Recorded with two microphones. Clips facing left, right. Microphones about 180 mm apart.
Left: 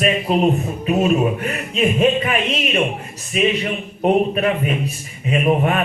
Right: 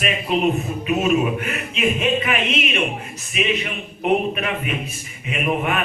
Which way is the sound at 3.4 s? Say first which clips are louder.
Left 5 dB; 40° left (ahead or behind).